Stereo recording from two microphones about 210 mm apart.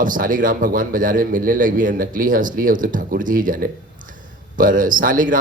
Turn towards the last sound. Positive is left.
turn(degrees=-40)  # may be behind; listen again after turning